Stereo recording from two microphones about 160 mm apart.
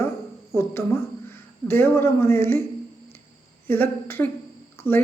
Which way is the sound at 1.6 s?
15° left (ahead or behind).